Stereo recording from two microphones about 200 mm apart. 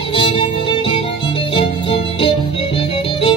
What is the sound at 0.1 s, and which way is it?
Music, 25° left (ahead or behind).